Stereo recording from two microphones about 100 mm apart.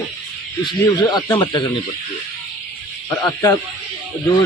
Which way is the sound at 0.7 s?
45° left (ahead or behind).